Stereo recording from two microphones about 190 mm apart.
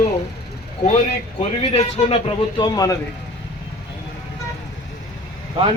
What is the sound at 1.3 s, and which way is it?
Speech, 30° left (ahead or behind).